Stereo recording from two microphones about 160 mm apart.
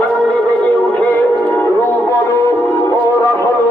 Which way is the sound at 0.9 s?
10° left (ahead or behind).